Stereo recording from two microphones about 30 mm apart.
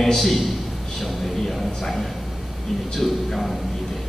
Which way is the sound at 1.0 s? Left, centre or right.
Centre.